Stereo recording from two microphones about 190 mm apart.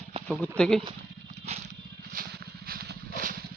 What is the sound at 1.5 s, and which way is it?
Crushing, 35° right (ahead or behind).